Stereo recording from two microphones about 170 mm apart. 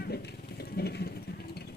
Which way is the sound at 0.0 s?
75° left (ahead or behind).